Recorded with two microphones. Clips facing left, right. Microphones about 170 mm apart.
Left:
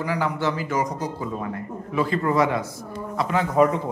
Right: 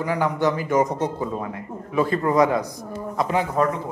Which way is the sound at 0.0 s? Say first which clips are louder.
Right 3 dB; 20° right (ahead or behind).